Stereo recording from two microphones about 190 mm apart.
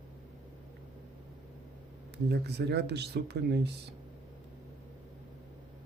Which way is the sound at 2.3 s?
60° right (ahead or behind).